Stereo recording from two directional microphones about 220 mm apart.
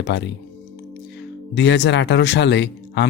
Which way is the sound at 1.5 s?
50° left (ahead or behind).